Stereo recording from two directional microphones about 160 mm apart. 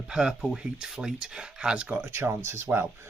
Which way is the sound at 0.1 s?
5° right (ahead or behind).